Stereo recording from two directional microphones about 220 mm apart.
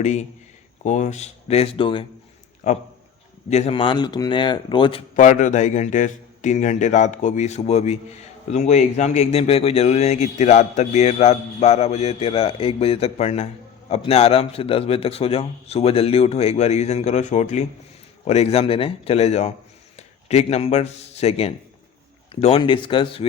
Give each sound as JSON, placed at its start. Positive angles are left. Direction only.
{"t": 0.0, "sound": "a man's voice", "side_deg": 30}
{"t": 3.5, "sound": "a man's voice", "side_deg": 25}